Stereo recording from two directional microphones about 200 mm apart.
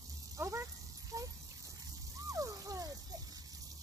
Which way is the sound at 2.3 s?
15° right (ahead or behind).